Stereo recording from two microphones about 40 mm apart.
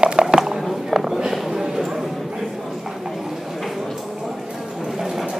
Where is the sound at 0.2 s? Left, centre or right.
Centre.